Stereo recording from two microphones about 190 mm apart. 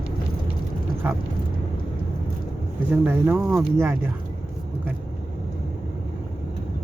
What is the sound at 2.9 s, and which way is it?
Speech, 10° right (ahead or behind).